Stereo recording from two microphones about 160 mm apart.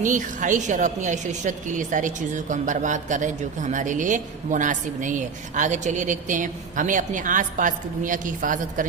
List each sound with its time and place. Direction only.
0.0 s a woman's voice: 55° right (ahead or behind)